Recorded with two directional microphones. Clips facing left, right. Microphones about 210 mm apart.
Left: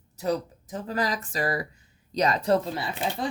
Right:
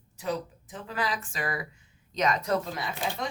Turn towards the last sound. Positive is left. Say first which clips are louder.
# left 3 dB
turn(degrees=30)  # may be behind; listen again after turning